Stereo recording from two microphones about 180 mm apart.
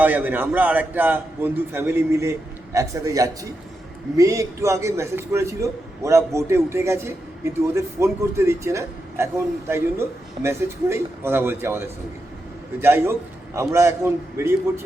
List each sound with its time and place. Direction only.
0.0 s a man's voice: 10° right (ahead or behind)
12.8 s a man's voice: 15° right (ahead or behind)